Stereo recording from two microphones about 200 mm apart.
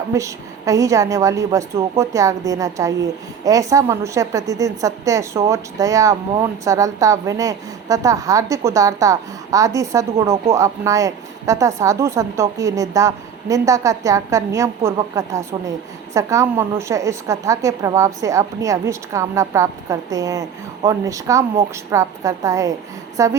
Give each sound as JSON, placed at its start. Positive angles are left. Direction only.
{"t": 0.1, "sound": "a woman's voice", "side_deg": -15}